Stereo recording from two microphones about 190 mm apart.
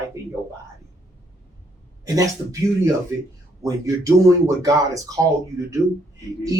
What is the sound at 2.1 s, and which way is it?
Speech, 15° right (ahead or behind).